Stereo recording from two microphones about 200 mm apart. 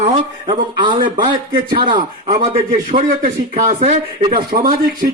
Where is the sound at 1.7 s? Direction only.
45° right (ahead or behind).